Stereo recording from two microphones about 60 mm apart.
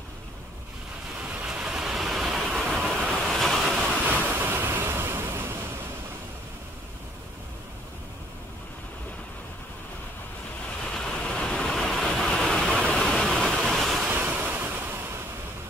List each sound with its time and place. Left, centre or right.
1.5 s vehicle: centre
3.1 s waves: centre
3.7 s vehicle: right
4.4 s waves: right
10.8 s vehicle: centre
13.7 s waves: centre
14.1 s waves: right